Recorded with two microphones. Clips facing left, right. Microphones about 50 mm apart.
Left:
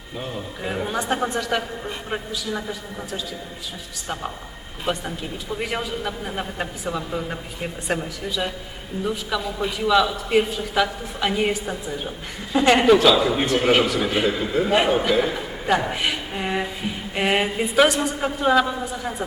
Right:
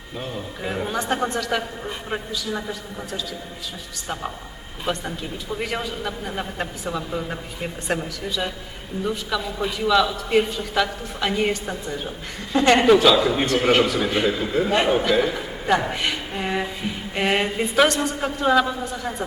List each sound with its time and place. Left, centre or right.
0.2 s a man's voice: centre
4.9 s a man's voice: centre